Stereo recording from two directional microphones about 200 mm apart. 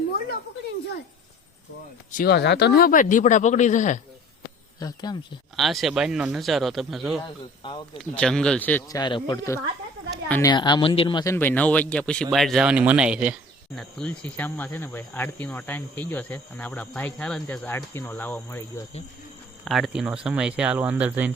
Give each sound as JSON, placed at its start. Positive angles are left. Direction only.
{"t": 2.1, "sound": "speech", "side_deg": 55}
{"t": 4.8, "sound": "a man's voice", "side_deg": 20}
{"t": 5.5, "sound": "speech", "side_deg": 0}
{"t": 9.0, "sound": "a man's voice", "side_deg": 25}
{"t": 10.2, "sound": "speech", "side_deg": 10}
{"t": 10.5, "sound": "speech", "side_deg": 20}
{"t": 19.6, "sound": "speech", "side_deg": 0}